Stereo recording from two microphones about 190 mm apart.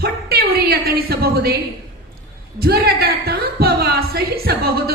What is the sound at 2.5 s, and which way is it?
A woman's voice, 55° right (ahead or behind).